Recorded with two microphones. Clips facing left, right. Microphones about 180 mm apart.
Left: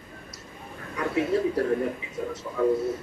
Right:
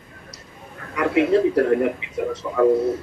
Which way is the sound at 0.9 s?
80° right.